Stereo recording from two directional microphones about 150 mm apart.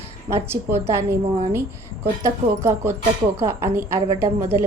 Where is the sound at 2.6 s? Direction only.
15° right (ahead or behind).